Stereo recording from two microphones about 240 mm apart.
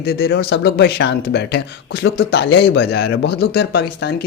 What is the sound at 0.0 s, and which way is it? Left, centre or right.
Speech, left.